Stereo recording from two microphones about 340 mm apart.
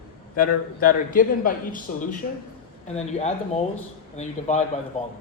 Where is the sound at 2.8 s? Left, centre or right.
Centre.